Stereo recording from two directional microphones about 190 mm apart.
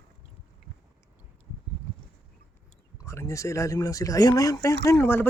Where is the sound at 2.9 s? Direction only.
15° left (ahead or behind).